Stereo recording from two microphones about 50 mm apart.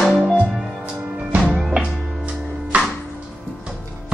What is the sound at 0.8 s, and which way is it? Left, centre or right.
Music, right.